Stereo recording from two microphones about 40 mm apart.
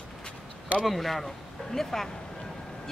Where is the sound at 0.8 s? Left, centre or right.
Centre.